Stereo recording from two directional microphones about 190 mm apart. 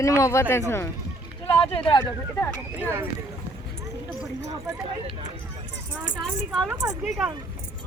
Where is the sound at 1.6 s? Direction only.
25° left (ahead or behind).